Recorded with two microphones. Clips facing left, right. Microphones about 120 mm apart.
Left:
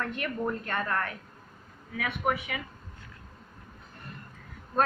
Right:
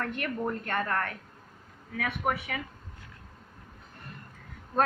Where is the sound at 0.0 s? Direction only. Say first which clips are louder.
Even; 55° right (ahead or behind).